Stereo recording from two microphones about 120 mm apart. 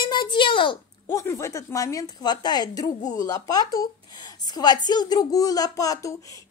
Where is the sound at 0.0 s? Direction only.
40° left (ahead or behind).